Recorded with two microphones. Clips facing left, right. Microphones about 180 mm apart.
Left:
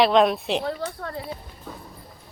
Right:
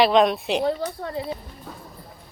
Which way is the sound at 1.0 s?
20° right (ahead or behind).